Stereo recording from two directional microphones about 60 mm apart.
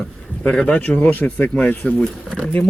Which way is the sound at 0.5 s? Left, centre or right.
Centre.